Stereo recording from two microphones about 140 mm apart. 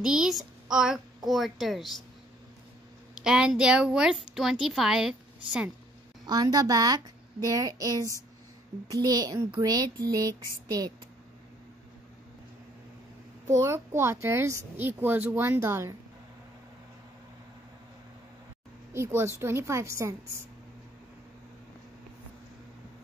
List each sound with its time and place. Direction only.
0.0 s a child's voice: 5° right (ahead or behind)
3.3 s a child's voice: 5° right (ahead or behind)
6.2 s speech: 30° right (ahead or behind)
13.6 s speech: 20° right (ahead or behind)
18.9 s speech: 20° right (ahead or behind)